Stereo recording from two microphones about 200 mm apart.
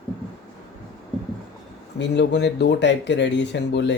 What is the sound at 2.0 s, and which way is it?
Speech, 60° left (ahead or behind).